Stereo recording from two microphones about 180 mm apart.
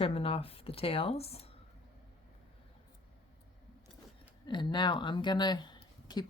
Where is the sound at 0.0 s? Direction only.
35° left (ahead or behind).